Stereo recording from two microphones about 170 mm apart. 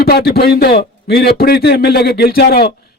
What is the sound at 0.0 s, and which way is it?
A man's voice, 65° left (ahead or behind).